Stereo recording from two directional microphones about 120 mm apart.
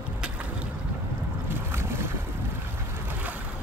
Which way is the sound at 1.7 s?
20° right (ahead or behind).